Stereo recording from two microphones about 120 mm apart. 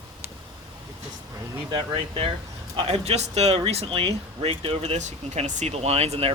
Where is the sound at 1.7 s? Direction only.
50° right (ahead or behind).